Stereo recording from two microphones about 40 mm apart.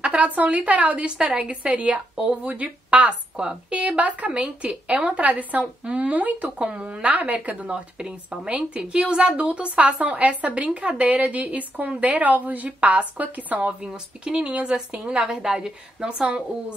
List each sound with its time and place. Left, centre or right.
0.0 s speech: right
1.1 s a woman's voice: right
9.4 s a woman's voice: right
14.2 s a woman's voice: right
15.2 s a woman's voice: centre